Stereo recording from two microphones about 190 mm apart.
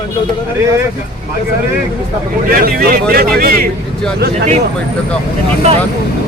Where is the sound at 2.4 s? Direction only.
50° right (ahead or behind).